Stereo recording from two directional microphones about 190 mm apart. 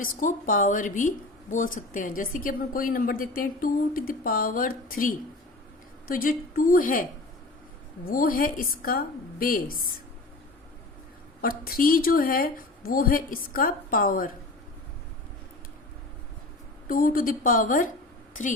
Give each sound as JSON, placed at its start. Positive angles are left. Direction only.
{"t": 0.2, "sound": "a woman's voice", "side_deg": 45}
{"t": 11.3, "sound": "a woman's voice", "side_deg": 50}
{"t": 16.9, "sound": "a woman's voice", "side_deg": 50}